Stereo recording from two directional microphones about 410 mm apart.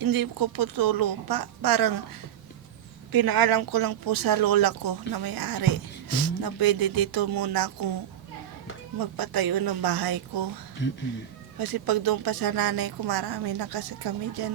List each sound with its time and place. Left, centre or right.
0.0 s speech: right
3.1 s speech: right
9.0 s speech: right
10.8 s speech: left
11.6 s speech: right